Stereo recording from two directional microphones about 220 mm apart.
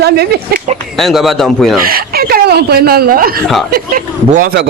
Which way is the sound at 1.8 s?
45° right (ahead or behind).